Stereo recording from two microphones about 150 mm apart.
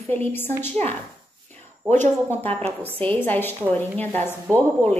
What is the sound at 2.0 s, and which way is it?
A woman's voice, 15° left (ahead or behind).